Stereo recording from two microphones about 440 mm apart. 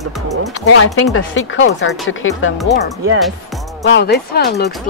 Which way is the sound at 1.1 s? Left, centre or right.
Left.